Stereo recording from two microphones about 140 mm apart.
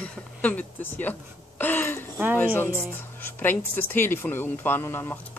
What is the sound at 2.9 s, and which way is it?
Speech, 15° left (ahead or behind).